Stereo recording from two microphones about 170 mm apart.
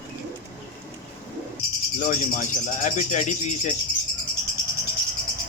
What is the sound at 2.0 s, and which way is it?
Speech, 50° left (ahead or behind).